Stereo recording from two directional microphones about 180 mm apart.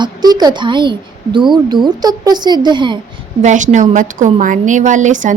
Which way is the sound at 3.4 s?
40° right (ahead or behind).